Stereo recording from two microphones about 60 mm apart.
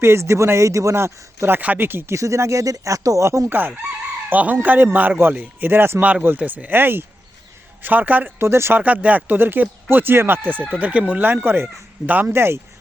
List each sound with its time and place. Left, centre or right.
0.0 s speech: right
2.1 s speech: right
3.2 s speech: right
3.5 s speech: right
6.0 s speech: right
8.4 s speech: right
8.8 s speech: right
11.2 s speech: right
12.3 s speech: right